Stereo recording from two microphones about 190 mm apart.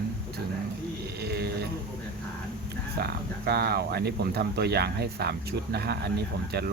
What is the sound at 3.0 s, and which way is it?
Speech, 60° right (ahead or behind).